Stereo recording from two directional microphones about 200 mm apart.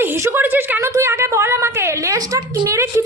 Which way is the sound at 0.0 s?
10° right (ahead or behind).